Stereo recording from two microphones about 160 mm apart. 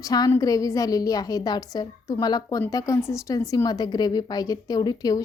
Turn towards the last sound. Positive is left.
turn(degrees=25)  # may be behind; listen again after turning